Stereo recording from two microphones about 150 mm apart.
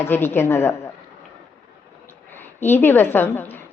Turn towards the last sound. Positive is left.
turn(degrees=15)  # may be behind; listen again after turning